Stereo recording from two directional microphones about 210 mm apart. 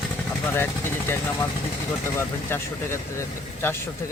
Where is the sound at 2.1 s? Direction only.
10° left (ahead or behind).